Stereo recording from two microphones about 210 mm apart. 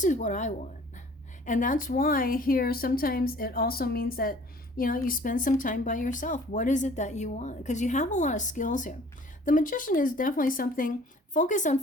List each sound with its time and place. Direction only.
0.0 s speech: 35° left (ahead or behind)